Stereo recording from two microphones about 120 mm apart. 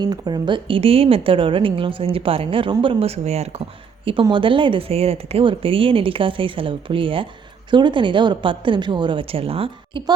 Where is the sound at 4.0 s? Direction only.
50° right (ahead or behind).